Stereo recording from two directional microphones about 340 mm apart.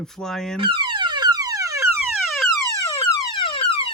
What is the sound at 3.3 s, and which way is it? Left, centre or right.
Fire alarm, centre.